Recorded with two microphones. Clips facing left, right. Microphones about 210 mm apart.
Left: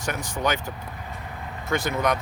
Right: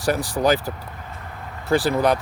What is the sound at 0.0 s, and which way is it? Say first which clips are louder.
Speech: right 7 dB; 35° right (ahead or behind).